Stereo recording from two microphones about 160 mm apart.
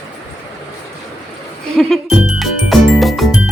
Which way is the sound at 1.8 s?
Centre (ahead or behind).